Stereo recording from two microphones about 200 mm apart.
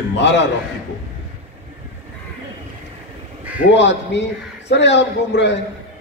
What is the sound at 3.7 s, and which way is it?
A man's voice, 60° left (ahead or behind).